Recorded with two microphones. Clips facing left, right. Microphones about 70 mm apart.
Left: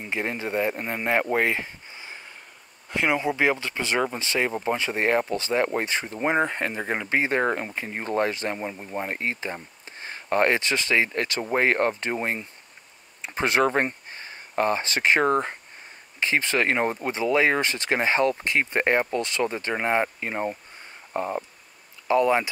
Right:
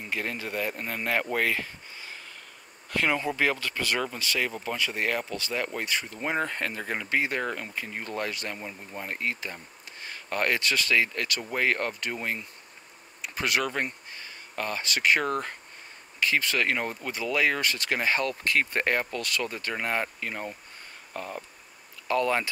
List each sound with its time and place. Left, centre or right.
0.0 s speech: left